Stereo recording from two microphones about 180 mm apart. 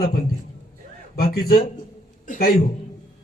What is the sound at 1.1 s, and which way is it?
A man's voice, 55° left (ahead or behind).